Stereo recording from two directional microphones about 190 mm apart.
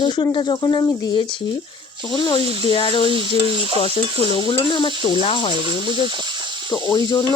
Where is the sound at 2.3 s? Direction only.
25° left (ahead or behind).